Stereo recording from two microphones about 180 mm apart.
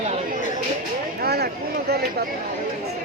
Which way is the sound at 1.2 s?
60° right (ahead or behind).